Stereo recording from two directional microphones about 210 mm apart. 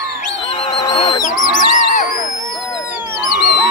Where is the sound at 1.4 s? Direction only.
40° left (ahead or behind).